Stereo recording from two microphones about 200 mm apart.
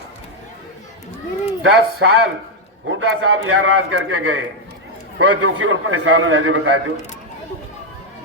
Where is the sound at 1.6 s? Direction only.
90° right; by 4.4 s 70° right (ahead or behind).